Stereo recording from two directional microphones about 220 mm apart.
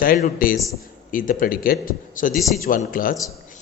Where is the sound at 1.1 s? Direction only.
40° left (ahead or behind).